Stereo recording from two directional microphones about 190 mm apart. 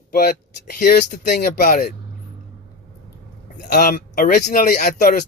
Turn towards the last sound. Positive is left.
turn(degrees=50)  # may be behind; listen again after turning